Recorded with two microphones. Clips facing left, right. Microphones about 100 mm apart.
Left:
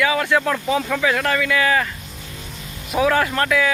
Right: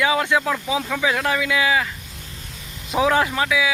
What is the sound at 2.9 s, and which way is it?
Speech, 20° right (ahead or behind).